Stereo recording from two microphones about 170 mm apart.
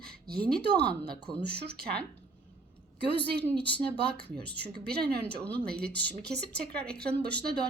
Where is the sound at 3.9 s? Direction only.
70° right (ahead or behind).